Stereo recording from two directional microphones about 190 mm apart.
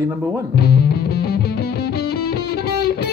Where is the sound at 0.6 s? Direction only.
55° left (ahead or behind).